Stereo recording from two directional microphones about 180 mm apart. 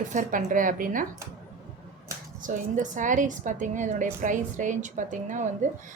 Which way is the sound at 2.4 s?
45° right (ahead or behind).